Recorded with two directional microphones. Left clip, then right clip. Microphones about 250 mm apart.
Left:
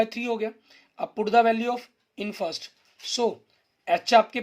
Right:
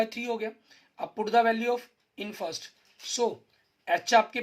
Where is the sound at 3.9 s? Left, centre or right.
Left.